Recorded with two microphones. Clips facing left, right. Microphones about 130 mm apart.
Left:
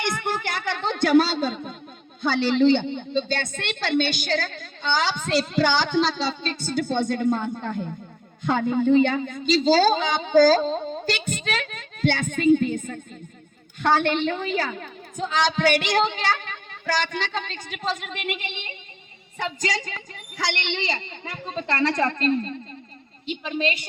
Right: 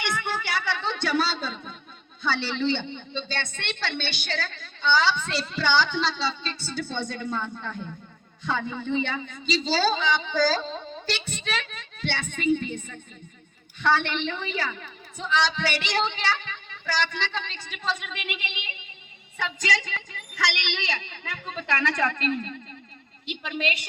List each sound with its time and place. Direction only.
0.0 s a woman's voice: 45° left (ahead or behind)
18.5 s speech: 5° right (ahead or behind)
19.4 s a woman's voice: 40° left (ahead or behind)